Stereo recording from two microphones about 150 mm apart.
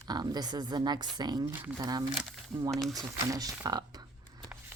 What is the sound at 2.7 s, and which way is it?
Speech, centre (ahead or behind).